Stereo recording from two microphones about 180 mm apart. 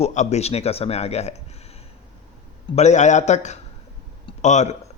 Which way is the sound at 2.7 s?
40° left (ahead or behind).